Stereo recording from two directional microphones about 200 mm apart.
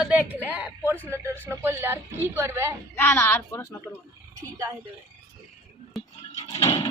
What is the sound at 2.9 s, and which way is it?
Speech, 10° left (ahead or behind).